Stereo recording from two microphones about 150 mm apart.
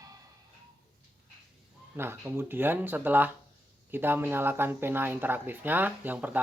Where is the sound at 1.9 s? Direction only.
15° right (ahead or behind).